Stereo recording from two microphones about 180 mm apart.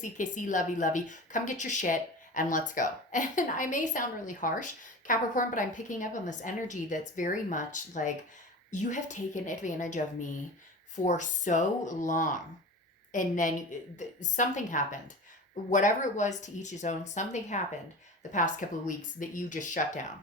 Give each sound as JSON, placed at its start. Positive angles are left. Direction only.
{"t": 0.0, "sound": "a woman's voice", "side_deg": 45}